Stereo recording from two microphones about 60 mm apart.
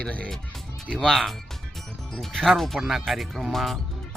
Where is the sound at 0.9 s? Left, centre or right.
Centre.